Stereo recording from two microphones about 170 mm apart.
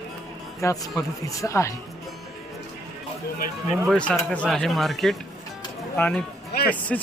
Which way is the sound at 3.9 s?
5° left (ahead or behind).